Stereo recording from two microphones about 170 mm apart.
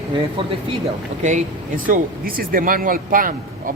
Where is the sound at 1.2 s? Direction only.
45° right (ahead or behind).